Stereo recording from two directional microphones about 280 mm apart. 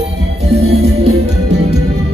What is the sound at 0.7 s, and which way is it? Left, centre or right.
Music, right.